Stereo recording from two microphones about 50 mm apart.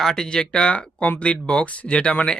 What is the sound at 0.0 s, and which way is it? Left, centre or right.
Speech, centre.